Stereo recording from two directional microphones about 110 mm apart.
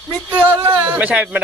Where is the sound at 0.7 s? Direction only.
15° right (ahead or behind).